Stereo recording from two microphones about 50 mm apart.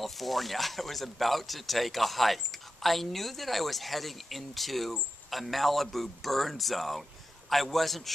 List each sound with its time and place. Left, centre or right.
0.0 s speech: centre